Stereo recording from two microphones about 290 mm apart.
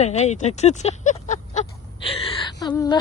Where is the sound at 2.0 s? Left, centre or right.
Centre.